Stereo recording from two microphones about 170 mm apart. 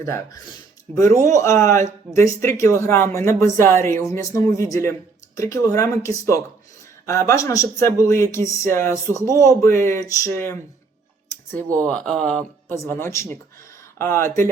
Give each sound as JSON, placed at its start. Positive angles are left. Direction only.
{"t": 0.0, "sound": "speech", "side_deg": 20}
{"t": 1.1, "sound": "a man's voice", "side_deg": -45}
{"t": 1.4, "sound": "speech", "side_deg": 15}
{"t": 11.9, "sound": "speech", "side_deg": 5}